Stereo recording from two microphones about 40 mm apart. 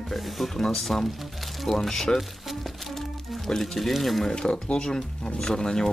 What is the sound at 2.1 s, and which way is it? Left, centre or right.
Music, centre.